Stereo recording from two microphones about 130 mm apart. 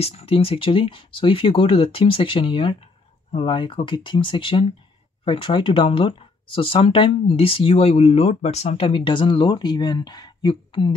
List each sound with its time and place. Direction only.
0.0 s speech: 50° left (ahead or behind)